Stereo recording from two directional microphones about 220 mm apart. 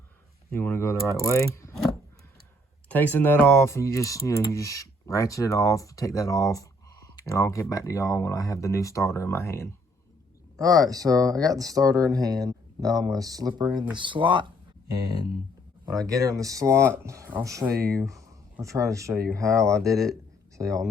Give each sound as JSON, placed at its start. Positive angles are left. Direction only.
{"t": 0.5, "sound": "speech", "side_deg": 10}
{"t": 2.9, "sound": "speech", "side_deg": 10}
{"t": 10.6, "sound": "speech", "side_deg": -15}
{"t": 15.9, "sound": "speech", "side_deg": -15}